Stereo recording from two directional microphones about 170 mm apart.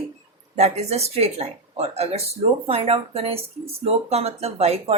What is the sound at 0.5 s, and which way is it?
Speech, 40° right (ahead or behind).